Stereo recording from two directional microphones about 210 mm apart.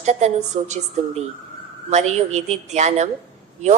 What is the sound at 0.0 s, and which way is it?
A woman's voice, 35° right (ahead or behind).